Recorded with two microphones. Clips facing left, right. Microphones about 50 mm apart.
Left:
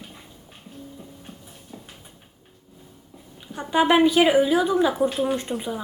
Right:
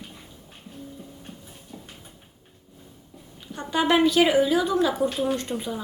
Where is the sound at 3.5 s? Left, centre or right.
Centre.